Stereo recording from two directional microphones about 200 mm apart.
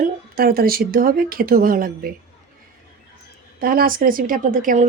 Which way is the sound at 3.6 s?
45° right (ahead or behind).